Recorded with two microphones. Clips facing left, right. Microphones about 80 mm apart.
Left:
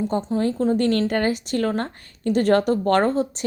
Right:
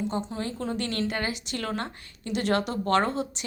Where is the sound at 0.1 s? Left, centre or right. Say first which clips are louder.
Left 9 dB; left.